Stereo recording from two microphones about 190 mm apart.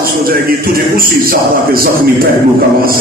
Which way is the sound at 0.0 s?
50° right (ahead or behind).